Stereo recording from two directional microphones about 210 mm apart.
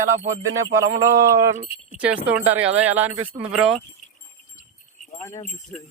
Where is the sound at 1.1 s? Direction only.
15° right (ahead or behind).